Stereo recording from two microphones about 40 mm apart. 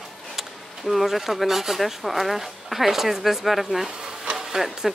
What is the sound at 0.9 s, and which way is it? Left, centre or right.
Speech, centre.